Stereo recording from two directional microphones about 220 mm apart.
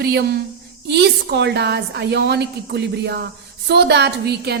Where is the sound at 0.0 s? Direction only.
45° right (ahead or behind).